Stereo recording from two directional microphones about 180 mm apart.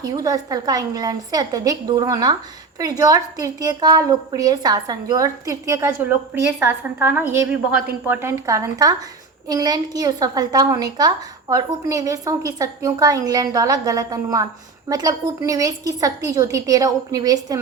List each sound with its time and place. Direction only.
0.0 s a woman's voice: 20° right (ahead or behind)